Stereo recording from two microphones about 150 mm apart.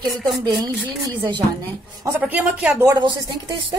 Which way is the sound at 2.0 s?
10° right (ahead or behind).